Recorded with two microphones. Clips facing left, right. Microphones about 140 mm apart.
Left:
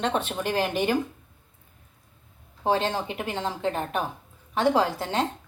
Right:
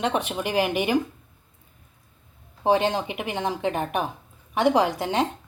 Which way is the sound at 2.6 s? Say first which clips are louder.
Right 3 dB; 15° right (ahead or behind).